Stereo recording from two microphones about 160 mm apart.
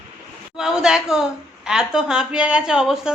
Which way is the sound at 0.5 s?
5° right (ahead or behind).